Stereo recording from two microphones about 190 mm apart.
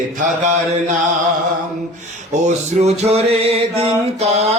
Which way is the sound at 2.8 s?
35° right (ahead or behind).